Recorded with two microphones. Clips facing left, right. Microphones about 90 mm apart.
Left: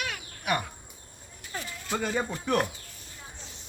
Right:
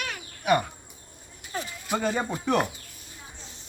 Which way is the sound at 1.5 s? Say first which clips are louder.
Right 3 dB; 20° right (ahead or behind).